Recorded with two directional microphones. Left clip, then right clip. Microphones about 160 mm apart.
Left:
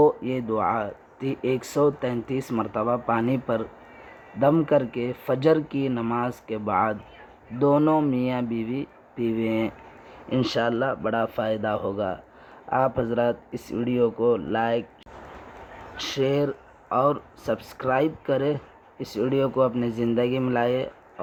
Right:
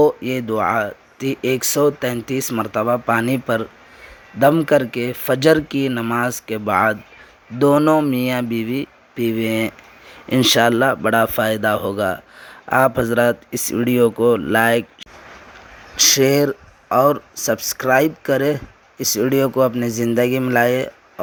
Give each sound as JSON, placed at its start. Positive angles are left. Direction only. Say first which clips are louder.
{"t": 0.0, "sound": "speech", "louder": "right 4 dB", "side_deg": -35}
{"t": 10.2, "sound": "speech", "louder": "right 10 dB", "side_deg": -45}
{"t": 16.0, "sound": "speech", "louder": "right 10 dB", "side_deg": -45}